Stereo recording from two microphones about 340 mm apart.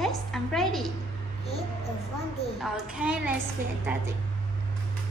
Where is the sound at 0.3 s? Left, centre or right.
Centre.